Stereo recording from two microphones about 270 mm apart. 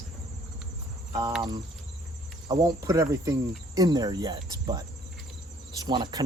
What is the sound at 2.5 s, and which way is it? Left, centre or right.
Cricket, centre.